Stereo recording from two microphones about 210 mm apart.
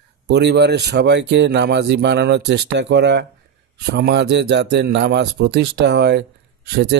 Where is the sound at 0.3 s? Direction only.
55° right (ahead or behind).